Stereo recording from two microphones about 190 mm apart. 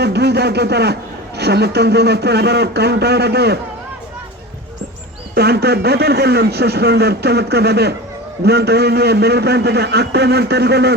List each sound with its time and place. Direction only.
0.0 s a sound: 60° right (ahead or behind)
1.4 s a man's voice: 60° right (ahead or behind)
5.3 s a man's voice: 60° right (ahead or behind)